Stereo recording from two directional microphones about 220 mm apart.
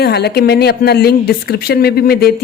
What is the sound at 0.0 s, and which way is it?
A woman's voice, 50° left (ahead or behind).